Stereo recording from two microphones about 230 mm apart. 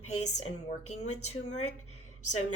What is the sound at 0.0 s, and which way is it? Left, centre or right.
Speech, left.